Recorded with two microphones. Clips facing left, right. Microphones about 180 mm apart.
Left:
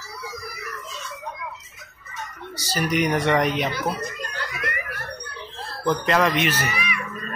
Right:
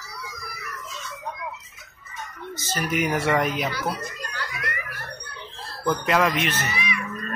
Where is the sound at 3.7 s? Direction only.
20° left (ahead or behind).